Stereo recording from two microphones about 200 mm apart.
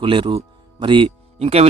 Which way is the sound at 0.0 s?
25° right (ahead or behind).